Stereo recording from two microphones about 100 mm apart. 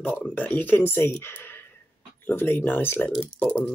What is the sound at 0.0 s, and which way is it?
Speech, 15° left (ahead or behind).